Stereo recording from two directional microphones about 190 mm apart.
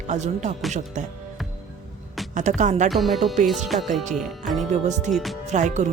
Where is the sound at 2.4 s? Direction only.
40° right (ahead or behind).